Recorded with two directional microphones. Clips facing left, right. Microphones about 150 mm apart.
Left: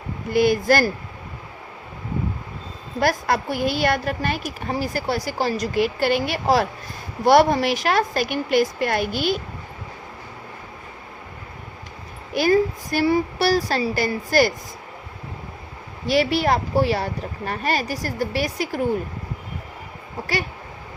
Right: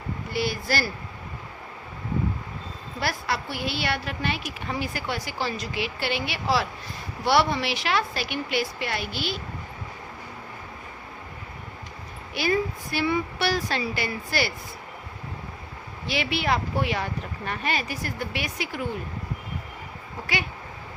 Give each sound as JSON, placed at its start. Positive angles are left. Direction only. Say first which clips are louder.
{"t": 0.3, "sound": "a woman's voice", "louder": "left 10 dB", "side_deg": 50}
{"t": 3.0, "sound": "a woman's voice", "louder": "left 8 dB", "side_deg": 45}
{"t": 12.3, "sound": "speech", "louder": "left 7 dB", "side_deg": 45}
{"t": 16.0, "sound": "speech", "louder": "left 7 dB", "side_deg": 40}